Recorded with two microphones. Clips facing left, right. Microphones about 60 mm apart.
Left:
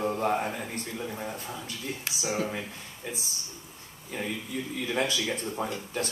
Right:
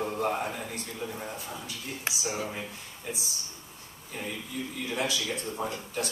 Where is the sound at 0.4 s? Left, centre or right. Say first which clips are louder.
Left 1 dB; left.